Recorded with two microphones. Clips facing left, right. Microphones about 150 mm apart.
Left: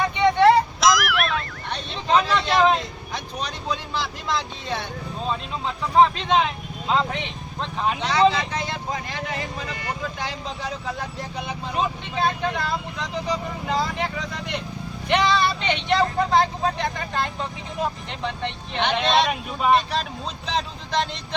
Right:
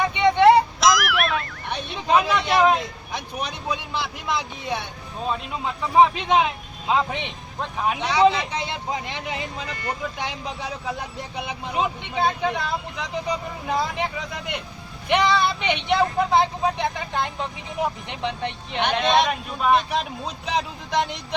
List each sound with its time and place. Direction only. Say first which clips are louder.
0.1 s vehicle: right 1 dB; 15° right (ahead or behind)
0.8 s a sound: even; centre (ahead or behind)
1.7 s vehicle: even; 10° right (ahead or behind)
3.3 s speech: even; 15° right (ahead or behind)
19.3 s speech: even; 5° left (ahead or behind)
20.5 s speech: right 1 dB; 10° right (ahead or behind)